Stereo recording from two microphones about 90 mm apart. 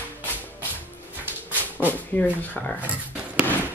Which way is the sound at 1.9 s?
20° left (ahead or behind).